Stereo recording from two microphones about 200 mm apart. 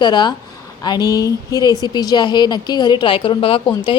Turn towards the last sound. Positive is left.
turn(degrees=25)  # may be behind; listen again after turning